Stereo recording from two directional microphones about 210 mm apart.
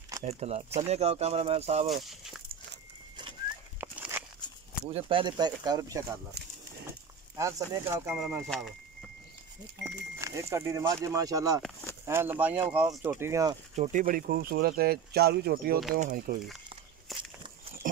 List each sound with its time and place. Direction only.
0.2 s speech: 30° right (ahead or behind)
1.9 s speech: centre (ahead or behind)
3.8 s walk: 10° right (ahead or behind)
4.8 s speech: 30° right (ahead or behind)
7.3 s speech: 15° right (ahead or behind); by 8.7 s centre (ahead or behind)
10.1 s a sound: 15° right (ahead or behind)
10.5 s speech: 10° right (ahead or behind)
11.6 s a sound: 10° left (ahead or behind)
12.1 s speech: 10° right (ahead or behind)
13.7 s speech: 35° right (ahead or behind)
17.1 s walk: centre (ahead or behind)